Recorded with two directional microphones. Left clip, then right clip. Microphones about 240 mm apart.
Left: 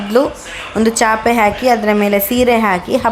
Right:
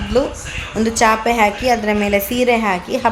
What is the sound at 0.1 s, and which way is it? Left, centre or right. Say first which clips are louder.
A woman's voice: left 4 dB; centre.